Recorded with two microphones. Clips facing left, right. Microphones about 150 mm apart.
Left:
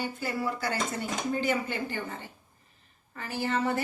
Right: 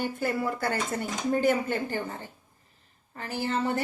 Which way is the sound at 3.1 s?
35° right (ahead or behind).